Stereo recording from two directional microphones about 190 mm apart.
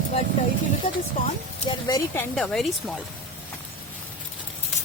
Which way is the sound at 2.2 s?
5° left (ahead or behind).